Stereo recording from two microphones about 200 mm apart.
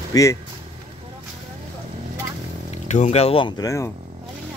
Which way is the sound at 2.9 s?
35° left (ahead or behind).